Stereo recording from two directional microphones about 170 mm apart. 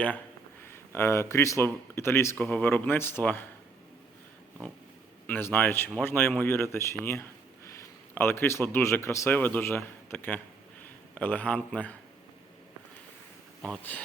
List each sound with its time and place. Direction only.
0.7 s speech: 15° left (ahead or behind)
5.2 s speech: 10° left (ahead or behind)